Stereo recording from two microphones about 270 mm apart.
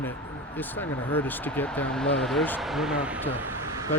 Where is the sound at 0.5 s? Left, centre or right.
Centre.